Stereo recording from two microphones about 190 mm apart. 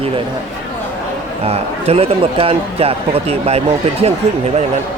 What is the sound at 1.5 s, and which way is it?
Speech, 30° right (ahead or behind).